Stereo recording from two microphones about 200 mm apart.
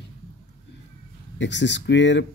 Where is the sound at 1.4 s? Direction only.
60° left (ahead or behind).